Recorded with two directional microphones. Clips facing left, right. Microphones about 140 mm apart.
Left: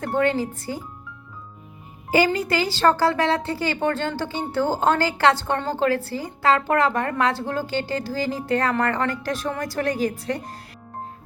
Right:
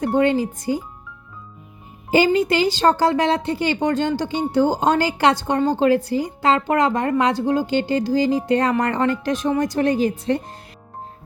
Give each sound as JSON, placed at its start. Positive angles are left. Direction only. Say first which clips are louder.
{"t": 0.0, "sound": "speech", "louder": "right 4 dB", "side_deg": -15}
{"t": 2.0, "sound": "a woman's voice", "louder": "right 4 dB", "side_deg": -20}